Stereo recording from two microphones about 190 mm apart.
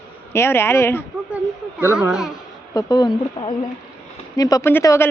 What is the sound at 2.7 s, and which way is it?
Speech, 20° left (ahead or behind).